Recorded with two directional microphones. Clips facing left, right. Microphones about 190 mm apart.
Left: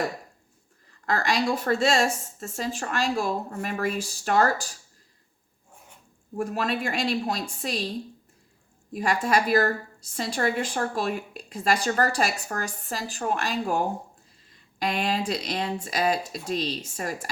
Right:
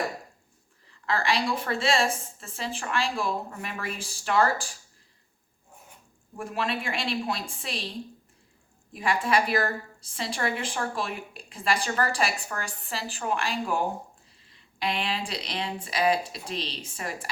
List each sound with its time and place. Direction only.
0.9 s a woman's voice: 45° left (ahead or behind)
6.3 s a woman's voice: 40° left (ahead or behind)